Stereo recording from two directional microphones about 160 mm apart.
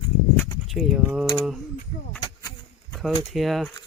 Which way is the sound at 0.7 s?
Centre (ahead or behind).